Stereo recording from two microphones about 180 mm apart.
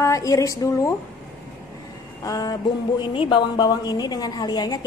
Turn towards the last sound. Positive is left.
turn(degrees=25)  # may be behind; listen again after turning